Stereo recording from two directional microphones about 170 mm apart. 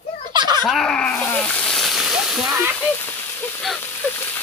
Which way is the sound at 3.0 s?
15° left (ahead or behind).